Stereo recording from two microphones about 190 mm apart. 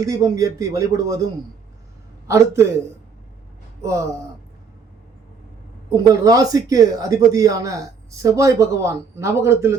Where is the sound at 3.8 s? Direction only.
15° right (ahead or behind).